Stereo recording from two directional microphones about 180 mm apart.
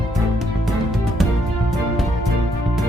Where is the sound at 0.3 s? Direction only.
Centre (ahead or behind).